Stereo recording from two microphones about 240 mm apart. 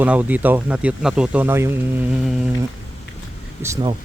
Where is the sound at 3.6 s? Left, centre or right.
Centre.